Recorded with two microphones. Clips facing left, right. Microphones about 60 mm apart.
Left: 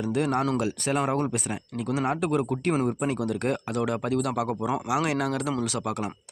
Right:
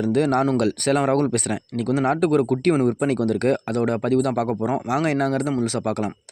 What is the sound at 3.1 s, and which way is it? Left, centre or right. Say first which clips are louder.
Speech: right 7 dB; right.